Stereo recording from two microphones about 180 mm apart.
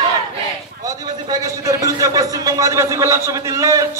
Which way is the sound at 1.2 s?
20° right (ahead or behind).